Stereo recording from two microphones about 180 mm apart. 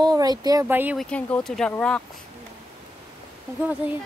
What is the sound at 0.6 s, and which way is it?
Speech, 10° right (ahead or behind).